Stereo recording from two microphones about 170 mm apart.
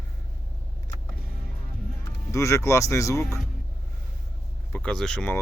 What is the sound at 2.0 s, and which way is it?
Speech, 15° left (ahead or behind).